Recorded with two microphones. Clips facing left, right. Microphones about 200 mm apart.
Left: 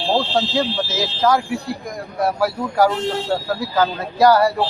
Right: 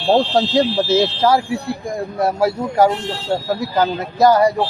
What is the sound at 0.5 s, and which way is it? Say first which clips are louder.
A man's voice: right 6 dB; 35° right (ahead or behind).